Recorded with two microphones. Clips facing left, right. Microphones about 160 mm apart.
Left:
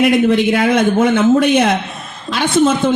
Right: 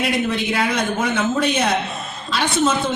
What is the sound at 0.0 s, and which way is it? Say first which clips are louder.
A man's voice: left 9 dB; 55° left (ahead or behind).